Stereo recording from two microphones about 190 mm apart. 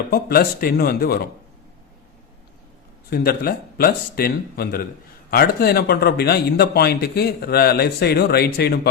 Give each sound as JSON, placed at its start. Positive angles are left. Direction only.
{"t": 0.1, "sound": "speech", "side_deg": 55}
{"t": 3.1, "sound": "a man's voice", "side_deg": 50}